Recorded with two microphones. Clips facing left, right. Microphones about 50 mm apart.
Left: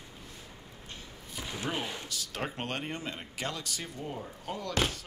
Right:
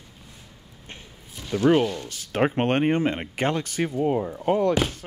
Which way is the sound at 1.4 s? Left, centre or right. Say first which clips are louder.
Right 12 dB; centre.